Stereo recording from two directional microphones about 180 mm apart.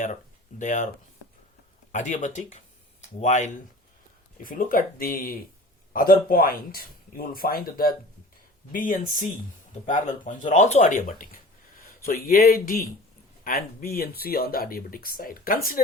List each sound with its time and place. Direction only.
0.6 s speech: 45° left (ahead or behind)
1.9 s speech: 45° left (ahead or behind)